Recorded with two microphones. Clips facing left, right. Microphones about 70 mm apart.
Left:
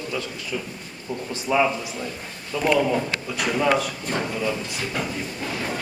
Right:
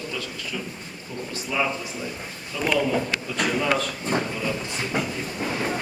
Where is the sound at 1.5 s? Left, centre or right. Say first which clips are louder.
Left 6 dB; left.